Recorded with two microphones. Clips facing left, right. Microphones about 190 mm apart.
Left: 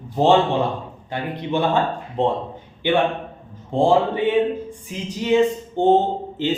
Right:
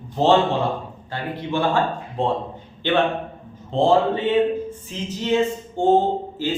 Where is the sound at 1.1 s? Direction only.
20° left (ahead or behind).